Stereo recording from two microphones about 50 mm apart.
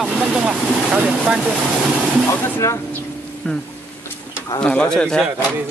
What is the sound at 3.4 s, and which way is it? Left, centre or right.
Speech, left.